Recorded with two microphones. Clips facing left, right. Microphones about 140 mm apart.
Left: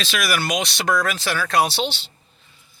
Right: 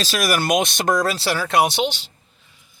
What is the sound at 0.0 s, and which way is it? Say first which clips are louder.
Speech: right 3 dB; 40° right (ahead or behind).